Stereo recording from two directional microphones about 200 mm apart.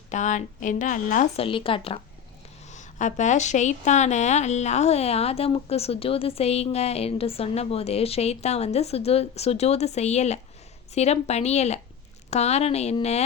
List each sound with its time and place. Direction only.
0.1 s a woman's voice: 40° left (ahead or behind)
1.5 s speech: 25° left (ahead or behind)
2.6 s a woman's voice: 35° left (ahead or behind)